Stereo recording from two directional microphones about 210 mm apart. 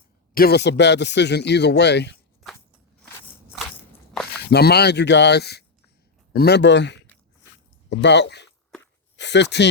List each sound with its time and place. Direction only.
0.3 s speech: 50° left (ahead or behind)
4.5 s a man's voice: 50° left (ahead or behind)